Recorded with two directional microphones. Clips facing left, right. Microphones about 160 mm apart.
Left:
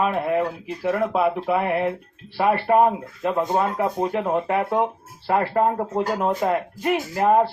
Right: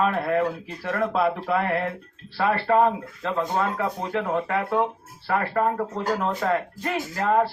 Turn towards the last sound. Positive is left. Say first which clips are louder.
# left 4 dB
turn(degrees=20)  # may be behind; listen again after turning